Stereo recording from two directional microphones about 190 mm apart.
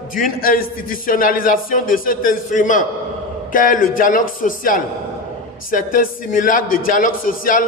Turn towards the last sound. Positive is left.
turn(degrees=45)  # may be behind; listen again after turning